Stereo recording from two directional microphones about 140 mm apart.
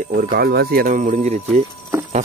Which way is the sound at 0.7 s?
80° right.